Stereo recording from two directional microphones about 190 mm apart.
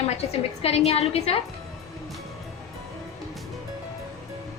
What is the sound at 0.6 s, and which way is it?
Speech, 35° left (ahead or behind).